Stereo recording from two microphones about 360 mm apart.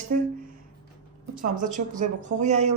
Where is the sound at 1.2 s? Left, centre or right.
Right.